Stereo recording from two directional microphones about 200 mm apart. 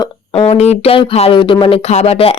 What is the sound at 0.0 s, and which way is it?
Speech, 25° left (ahead or behind).